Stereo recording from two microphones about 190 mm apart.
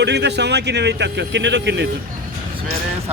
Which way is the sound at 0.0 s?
65° right (ahead or behind).